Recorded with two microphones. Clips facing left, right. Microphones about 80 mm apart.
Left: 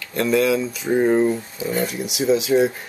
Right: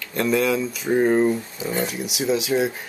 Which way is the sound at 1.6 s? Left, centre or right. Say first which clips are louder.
Left 2 dB; centre.